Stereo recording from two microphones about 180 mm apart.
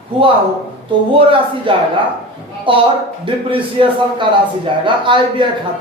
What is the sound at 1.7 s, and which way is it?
Speech, 30° right (ahead or behind).